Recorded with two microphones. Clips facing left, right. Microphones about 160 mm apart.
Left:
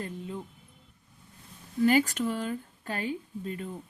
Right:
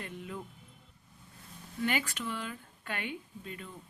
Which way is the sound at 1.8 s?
40° left (ahead or behind).